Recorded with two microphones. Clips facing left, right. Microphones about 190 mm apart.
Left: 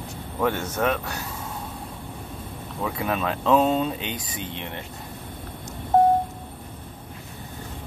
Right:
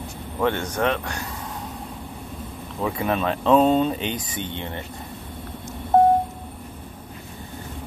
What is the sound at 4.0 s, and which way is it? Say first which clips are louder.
Speech: right 4 dB; 30° right (ahead or behind).